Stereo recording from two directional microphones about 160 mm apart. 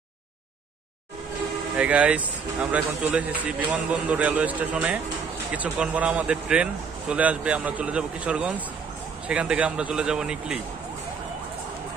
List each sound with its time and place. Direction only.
1.8 s speech: 10° right (ahead or behind)